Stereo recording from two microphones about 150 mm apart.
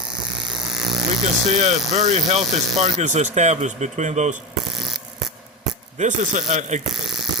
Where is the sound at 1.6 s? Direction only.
50° right (ahead or behind).